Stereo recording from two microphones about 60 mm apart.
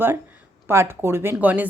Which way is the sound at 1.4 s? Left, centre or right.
Right.